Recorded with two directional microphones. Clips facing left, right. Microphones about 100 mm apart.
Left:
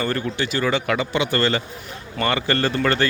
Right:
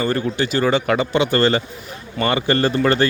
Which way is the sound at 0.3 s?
40° right (ahead or behind).